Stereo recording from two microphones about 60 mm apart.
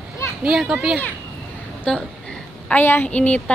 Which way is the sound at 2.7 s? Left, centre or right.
Left.